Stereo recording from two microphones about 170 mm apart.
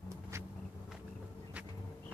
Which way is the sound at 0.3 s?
15° right (ahead or behind).